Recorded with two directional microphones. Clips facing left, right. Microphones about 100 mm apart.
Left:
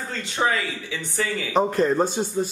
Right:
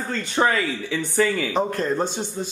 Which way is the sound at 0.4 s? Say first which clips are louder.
Right 3 dB; 55° right (ahead or behind).